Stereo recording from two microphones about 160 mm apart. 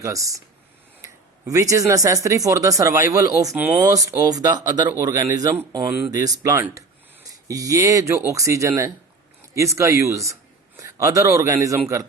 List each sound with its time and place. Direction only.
0.0 s speech: 20° right (ahead or behind)